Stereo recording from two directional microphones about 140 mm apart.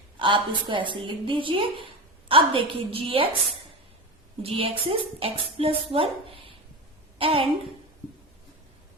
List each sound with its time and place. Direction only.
0.2 s a woman's voice: 35° right (ahead or behind)
4.4 s a woman's voice: 40° right (ahead or behind)